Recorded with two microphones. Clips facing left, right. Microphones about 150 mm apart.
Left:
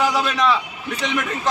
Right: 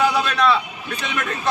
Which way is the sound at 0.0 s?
15° left (ahead or behind).